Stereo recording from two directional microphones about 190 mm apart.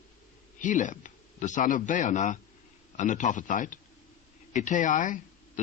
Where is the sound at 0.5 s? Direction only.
40° left (ahead or behind).